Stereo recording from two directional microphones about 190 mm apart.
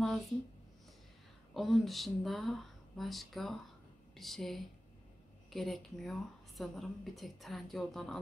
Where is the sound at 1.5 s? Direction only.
Centre (ahead or behind).